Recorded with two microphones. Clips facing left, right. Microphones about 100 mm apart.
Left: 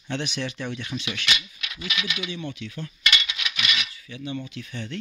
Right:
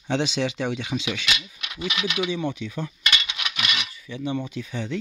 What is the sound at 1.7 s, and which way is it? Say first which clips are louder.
Speech: right 4 dB; 25° right (ahead or behind).